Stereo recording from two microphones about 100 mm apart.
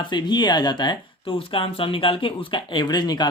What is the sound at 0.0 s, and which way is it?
Speech, 50° left (ahead or behind).